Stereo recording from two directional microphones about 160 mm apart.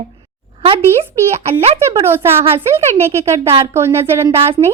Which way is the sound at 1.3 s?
40° right (ahead or behind).